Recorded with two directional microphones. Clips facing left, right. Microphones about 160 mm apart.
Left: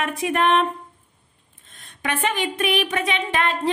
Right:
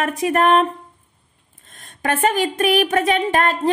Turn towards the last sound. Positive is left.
turn(degrees=-45)  # may be behind; listen again after turning